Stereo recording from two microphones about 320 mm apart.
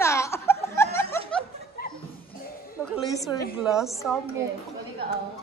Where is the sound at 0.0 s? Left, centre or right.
Centre.